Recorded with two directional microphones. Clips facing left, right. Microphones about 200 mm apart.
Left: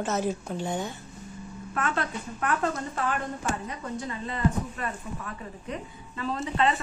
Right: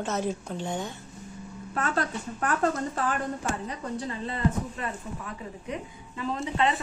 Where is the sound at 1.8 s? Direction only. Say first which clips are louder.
Right 1 dB; 40° right (ahead or behind).